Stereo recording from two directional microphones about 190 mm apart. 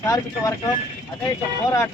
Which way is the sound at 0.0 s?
15° left (ahead or behind).